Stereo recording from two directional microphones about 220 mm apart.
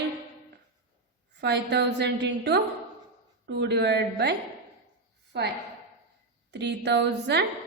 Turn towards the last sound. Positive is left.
turn(degrees=-50)  # may be behind; listen again after turning